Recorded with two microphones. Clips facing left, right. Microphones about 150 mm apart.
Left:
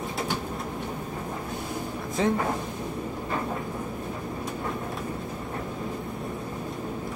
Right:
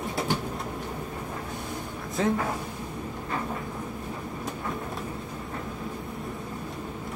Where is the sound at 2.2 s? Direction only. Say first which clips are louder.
Left 1 dB; centre (ahead or behind).